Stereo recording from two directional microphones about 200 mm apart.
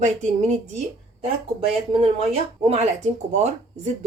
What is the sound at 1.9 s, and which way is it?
Speech, 30° right (ahead or behind).